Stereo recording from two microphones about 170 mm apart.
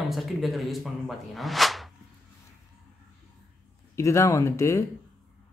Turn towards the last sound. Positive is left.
turn(degrees=15)  # may be behind; listen again after turning